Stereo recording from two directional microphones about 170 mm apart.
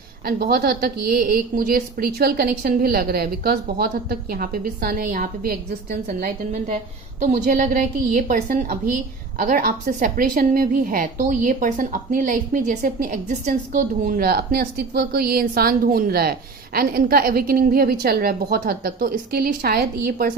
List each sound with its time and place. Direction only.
0.3 s a woman's voice: 60° right (ahead or behind)